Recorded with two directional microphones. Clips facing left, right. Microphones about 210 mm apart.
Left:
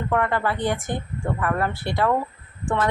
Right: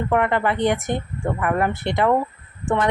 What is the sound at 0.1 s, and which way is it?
Speech, 20° right (ahead or behind).